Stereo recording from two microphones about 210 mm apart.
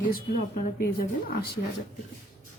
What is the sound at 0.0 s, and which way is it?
A woman's voice, 40° left (ahead or behind).